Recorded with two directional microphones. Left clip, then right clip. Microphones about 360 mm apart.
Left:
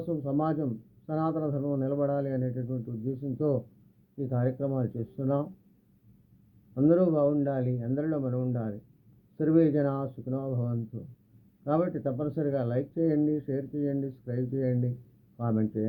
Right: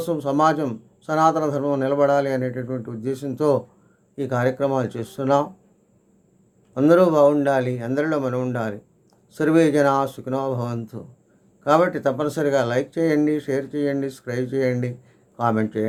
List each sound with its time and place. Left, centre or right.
0.0 s a man's voice: centre
0.3 s a man's voice: centre
6.7 s a man's voice: centre
9.4 s a man's voice: centre
11.6 s a man's voice: centre